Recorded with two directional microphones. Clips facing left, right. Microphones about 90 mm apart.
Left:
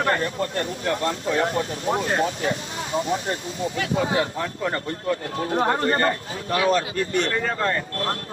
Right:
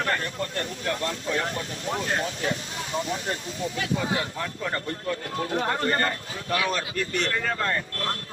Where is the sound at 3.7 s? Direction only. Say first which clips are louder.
Left 5 dB; 30° left (ahead or behind).